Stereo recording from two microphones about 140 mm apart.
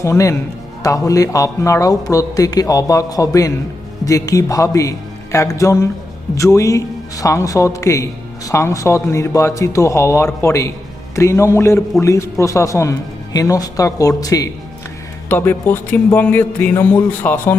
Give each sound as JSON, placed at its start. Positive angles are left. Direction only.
{"t": 0.0, "sound": "a man's voice", "side_deg": 20}